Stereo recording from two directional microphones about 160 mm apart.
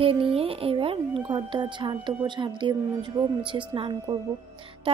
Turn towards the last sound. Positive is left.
turn(degrees=-30)  # may be behind; listen again after turning